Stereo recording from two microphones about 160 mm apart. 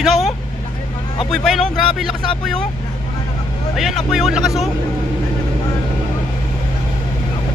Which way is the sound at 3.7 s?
Centre (ahead or behind).